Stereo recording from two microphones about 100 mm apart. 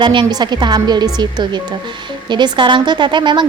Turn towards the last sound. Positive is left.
turn(degrees=-50)  # may be behind; listen again after turning